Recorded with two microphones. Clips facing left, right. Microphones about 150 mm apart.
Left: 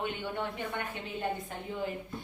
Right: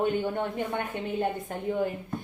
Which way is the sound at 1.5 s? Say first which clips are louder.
Right 6 dB; 50° right (ahead or behind).